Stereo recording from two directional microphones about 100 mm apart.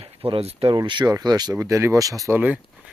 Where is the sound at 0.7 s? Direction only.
50° right (ahead or behind).